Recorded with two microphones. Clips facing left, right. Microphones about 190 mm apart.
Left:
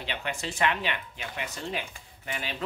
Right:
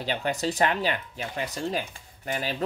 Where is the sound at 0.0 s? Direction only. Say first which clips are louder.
Right 7 dB; 40° right (ahead or behind).